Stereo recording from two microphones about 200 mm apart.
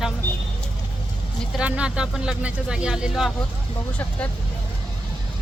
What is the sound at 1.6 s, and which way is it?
Speech, 5° right (ahead or behind).